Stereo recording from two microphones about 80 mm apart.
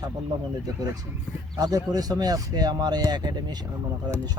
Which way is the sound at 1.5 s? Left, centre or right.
Right.